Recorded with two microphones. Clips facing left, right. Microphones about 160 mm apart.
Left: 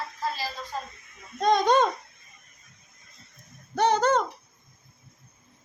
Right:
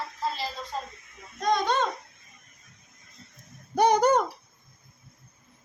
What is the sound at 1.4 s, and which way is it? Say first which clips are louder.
Speech: left 4 dB; 25° left (ahead or behind).